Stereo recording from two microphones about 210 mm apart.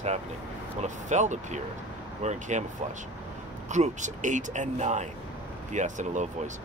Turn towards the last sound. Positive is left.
turn(degrees=-35)  # may be behind; listen again after turning